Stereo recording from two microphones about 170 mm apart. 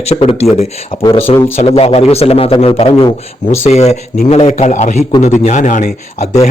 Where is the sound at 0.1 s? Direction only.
35° left (ahead or behind).